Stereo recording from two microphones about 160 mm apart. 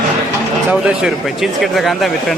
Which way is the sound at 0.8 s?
5° right (ahead or behind).